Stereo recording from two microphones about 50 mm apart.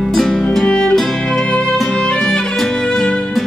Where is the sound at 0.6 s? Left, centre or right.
Centre.